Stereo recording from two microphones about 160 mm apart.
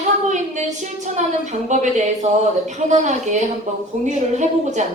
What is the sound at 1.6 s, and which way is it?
A woman's voice, 50° right (ahead or behind).